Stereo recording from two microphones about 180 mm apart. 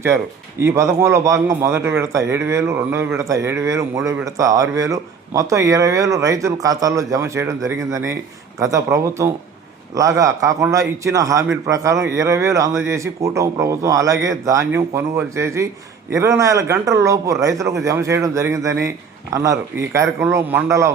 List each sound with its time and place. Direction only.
0.6 s speech: 15° right (ahead or behind)